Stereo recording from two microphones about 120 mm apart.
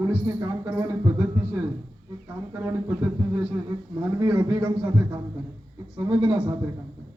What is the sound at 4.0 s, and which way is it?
A man's voice, 40° right (ahead or behind).